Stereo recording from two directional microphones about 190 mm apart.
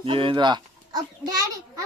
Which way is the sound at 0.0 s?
25° right (ahead or behind).